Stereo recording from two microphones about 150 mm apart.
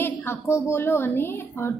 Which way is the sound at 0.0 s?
15° left (ahead or behind).